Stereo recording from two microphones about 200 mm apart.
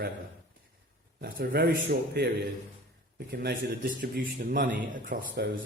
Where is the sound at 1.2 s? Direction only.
50° right (ahead or behind).